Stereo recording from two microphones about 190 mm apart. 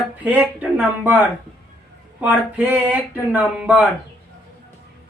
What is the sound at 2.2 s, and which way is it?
Speech, 5° right (ahead or behind).